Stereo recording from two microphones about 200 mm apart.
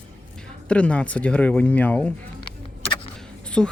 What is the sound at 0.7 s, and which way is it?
Speech, 5° left (ahead or behind).